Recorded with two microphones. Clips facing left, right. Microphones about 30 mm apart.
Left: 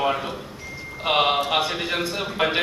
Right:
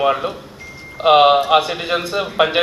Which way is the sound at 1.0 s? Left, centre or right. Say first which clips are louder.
Right 10 dB; right.